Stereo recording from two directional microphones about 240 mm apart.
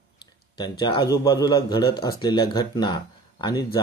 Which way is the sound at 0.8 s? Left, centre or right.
Centre.